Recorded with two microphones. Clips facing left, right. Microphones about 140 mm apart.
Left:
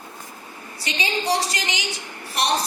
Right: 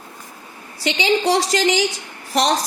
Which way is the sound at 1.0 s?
90° right.